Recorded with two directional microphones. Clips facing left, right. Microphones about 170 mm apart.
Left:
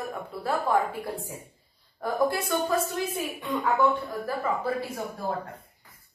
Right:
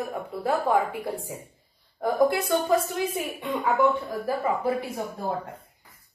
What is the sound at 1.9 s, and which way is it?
Speech, 20° right (ahead or behind).